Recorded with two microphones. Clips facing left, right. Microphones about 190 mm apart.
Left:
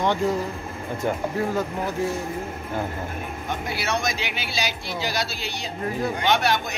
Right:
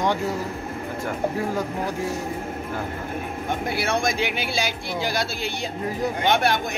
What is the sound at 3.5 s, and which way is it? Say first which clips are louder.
A man's voice: right 3 dB; 55° right (ahead or behind).